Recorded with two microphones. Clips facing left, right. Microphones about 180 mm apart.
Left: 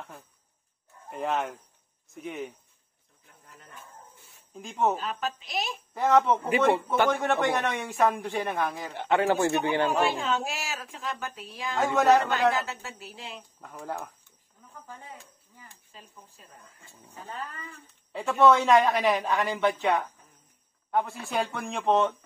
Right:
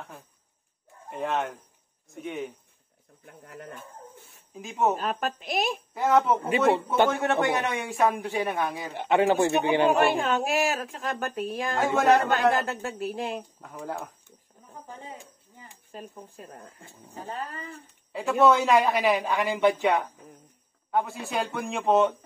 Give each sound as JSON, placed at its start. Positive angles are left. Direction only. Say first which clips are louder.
{"t": 1.1, "sound": "a man's voice", "louder": "right 1 dB", "side_deg": 0}
{"t": 3.3, "sound": "a woman's voice", "louder": "right 11 dB", "side_deg": -60}
{"t": 4.6, "sound": "a man's voice", "louder": "right 1 dB", "side_deg": -5}
{"t": 4.9, "sound": "a woman's voice", "louder": "right 3 dB", "side_deg": -55}
{"t": 5.9, "sound": "a man's voice", "louder": "even", "side_deg": -5}
{"t": 8.9, "sound": "speech", "louder": "right 3 dB", "side_deg": -15}
{"t": 9.8, "sound": "a woman's voice", "louder": "right 4 dB", "side_deg": -60}
{"t": 14.9, "sound": "a sound", "louder": "right 3 dB", "side_deg": -20}
{"t": 15.9, "sound": "a woman's voice", "louder": "right 13 dB", "side_deg": -55}
{"t": 17.1, "sound": "speech", "louder": "right 3 dB", "side_deg": -35}
{"t": 18.1, "sound": "a man's voice", "louder": "even", "side_deg": 0}
{"t": 20.9, "sound": "a man's voice", "louder": "right 1 dB", "side_deg": 0}